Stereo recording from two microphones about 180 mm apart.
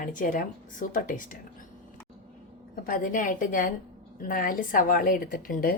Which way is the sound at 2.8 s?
50° left (ahead or behind).